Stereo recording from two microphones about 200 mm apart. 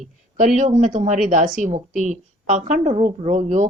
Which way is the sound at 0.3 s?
35° right (ahead or behind).